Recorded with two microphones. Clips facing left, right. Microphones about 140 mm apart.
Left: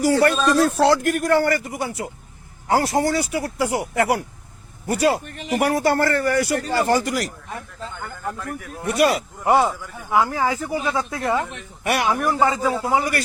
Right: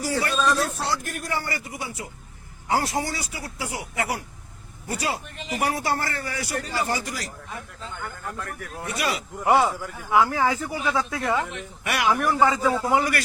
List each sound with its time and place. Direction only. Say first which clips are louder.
0.0 s a man's voice: left 7 dB; 65° left (ahead or behind)
1.5 s a man's voice: left 8 dB; 50° left (ahead or behind)
8.9 s speech: left 10 dB; 50° left (ahead or behind)
9.5 s speech: left 2 dB; 15° left (ahead or behind)
10.8 s a man's voice: left 2 dB; 25° left (ahead or behind)
11.8 s speech: left 3 dB; 35° left (ahead or behind)
12.1 s a man's voice: left 1 dB; 20° left (ahead or behind)